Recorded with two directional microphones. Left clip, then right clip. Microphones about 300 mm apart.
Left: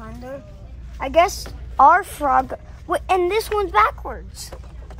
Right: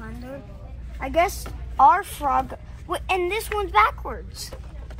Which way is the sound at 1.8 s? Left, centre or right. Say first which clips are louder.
Left 3 dB; left.